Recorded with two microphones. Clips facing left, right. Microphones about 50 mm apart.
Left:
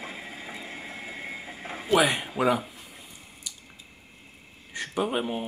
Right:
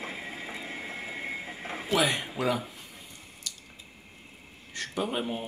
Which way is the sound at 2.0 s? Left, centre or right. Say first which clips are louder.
Left 4 dB; centre.